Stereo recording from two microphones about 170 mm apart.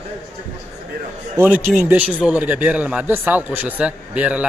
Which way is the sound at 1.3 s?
15° right (ahead or behind).